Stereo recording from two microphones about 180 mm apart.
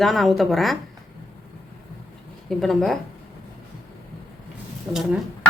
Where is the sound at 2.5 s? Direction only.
Centre (ahead or behind).